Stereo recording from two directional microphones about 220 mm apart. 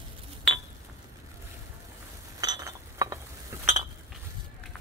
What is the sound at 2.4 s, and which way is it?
Chink, 15° right (ahead or behind).